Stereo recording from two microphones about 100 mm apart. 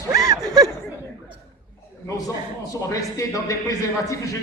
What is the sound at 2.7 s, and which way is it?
A man's voice, 35° left (ahead or behind).